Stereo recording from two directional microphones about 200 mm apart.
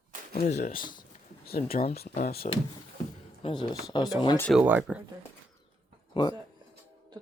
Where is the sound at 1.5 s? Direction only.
50° left (ahead or behind).